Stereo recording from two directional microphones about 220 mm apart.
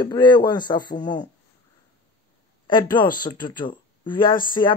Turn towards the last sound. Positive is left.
turn(degrees=20)  # may be behind; listen again after turning